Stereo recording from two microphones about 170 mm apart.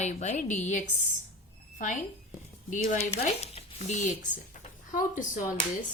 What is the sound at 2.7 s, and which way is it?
Speech, 40° left (ahead or behind).